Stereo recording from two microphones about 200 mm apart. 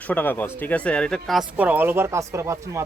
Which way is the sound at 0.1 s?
10° left (ahead or behind).